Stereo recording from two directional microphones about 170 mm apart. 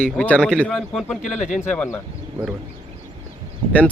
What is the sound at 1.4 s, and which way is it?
Speech, 45° left (ahead or behind).